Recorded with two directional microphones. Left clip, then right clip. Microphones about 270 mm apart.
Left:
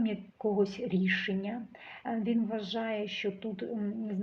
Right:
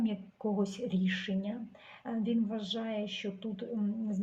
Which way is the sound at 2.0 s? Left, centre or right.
Left.